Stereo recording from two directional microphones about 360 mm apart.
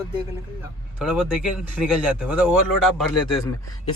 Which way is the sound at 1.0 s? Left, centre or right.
Centre.